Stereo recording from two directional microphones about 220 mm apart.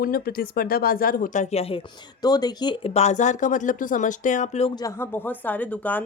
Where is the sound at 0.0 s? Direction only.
40° left (ahead or behind).